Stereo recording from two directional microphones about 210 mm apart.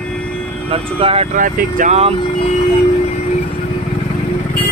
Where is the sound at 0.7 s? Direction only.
25° right (ahead or behind).